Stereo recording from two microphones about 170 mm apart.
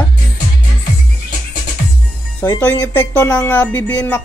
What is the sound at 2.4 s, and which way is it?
Speech, 10° left (ahead or behind).